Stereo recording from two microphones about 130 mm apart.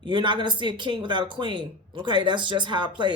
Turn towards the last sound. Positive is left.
turn(degrees=-35)  # may be behind; listen again after turning